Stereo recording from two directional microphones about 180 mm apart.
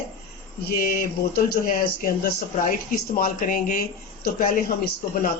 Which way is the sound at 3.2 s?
50° left (ahead or behind).